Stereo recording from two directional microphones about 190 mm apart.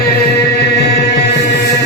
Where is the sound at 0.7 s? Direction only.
60° left (ahead or behind).